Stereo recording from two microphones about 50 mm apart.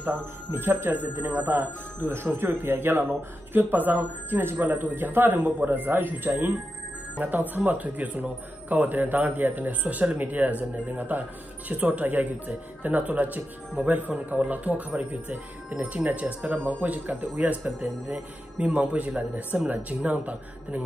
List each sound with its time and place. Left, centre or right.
0.0 s speech: right